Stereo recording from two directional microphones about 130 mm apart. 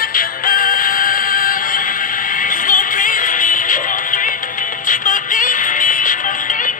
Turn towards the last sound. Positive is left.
turn(degrees=90)